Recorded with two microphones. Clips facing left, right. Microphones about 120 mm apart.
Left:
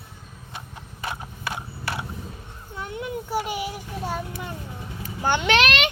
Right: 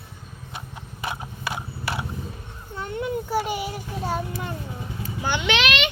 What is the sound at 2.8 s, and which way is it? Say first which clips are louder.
Child singing: right 3 dB; 10° left (ahead or behind).